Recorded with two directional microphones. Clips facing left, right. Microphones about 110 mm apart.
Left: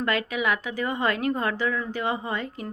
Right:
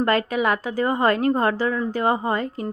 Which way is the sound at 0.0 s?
40° right (ahead or behind).